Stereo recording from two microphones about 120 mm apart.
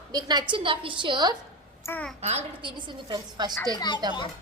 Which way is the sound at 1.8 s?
15° left (ahead or behind).